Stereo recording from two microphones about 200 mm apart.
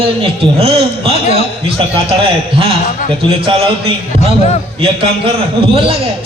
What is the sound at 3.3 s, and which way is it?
Speech, 30° right (ahead or behind).